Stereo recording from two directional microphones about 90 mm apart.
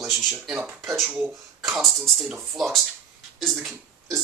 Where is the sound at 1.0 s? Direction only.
20° right (ahead or behind).